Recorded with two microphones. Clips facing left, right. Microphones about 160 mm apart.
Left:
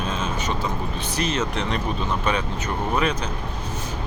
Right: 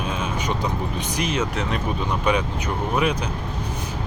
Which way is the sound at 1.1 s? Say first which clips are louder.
Even; 10° right (ahead or behind).